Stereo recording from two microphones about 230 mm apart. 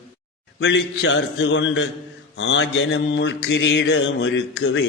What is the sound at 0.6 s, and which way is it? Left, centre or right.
A man's voice, left.